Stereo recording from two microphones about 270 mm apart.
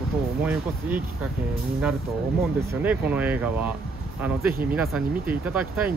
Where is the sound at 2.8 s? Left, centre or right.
Centre.